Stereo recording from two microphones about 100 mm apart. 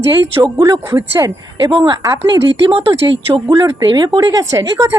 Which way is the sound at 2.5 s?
60° right (ahead or behind).